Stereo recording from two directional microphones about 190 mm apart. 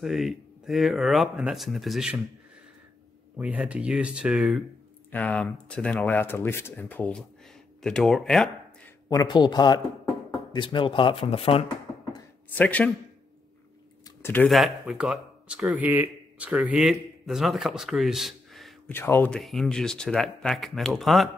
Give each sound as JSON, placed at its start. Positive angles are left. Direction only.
{"t": 0.0, "sound": "speech", "side_deg": 0}
{"t": 3.3, "sound": "speech", "side_deg": -5}
{"t": 9.1, "sound": "speech", "side_deg": 20}
{"t": 12.5, "sound": "speech", "side_deg": 5}
{"t": 14.0, "sound": "speech", "side_deg": 10}
{"t": 18.9, "sound": "speech", "side_deg": 10}